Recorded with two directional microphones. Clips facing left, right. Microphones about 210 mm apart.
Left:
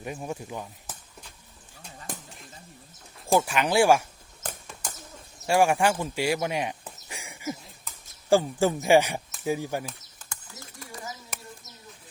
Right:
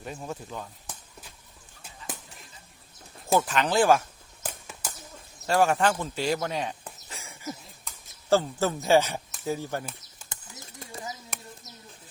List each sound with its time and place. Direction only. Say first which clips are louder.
0.0 s speech: left 2 dB; 15° left (ahead or behind)
2.0 s a sound: left 1 dB; centre (ahead or behind)
3.4 s speech: left 1 dB; 10° left (ahead or behind)
4.4 s a sound: even; 5° right (ahead or behind)
5.5 s speech: left 1 dB; 10° left (ahead or behind)
10.3 s bird: left 1 dB; 20° right (ahead or behind)